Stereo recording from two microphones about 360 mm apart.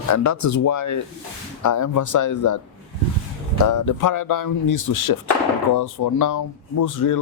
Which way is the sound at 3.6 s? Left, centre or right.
Left.